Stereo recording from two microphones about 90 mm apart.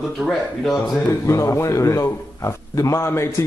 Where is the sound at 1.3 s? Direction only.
35° left (ahead or behind).